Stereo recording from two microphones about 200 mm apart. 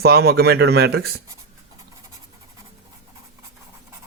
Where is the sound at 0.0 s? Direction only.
50° right (ahead or behind).